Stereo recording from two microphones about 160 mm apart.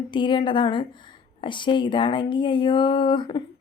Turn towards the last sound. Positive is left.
turn(degrees=30)  # may be behind; listen again after turning